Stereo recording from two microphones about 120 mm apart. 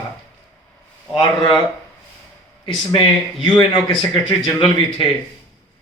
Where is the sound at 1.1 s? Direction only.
35° left (ahead or behind).